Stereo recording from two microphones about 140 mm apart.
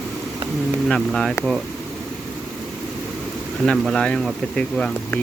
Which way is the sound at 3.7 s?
5° left (ahead or behind).